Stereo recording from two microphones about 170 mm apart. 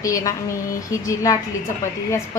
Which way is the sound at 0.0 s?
20° left (ahead or behind).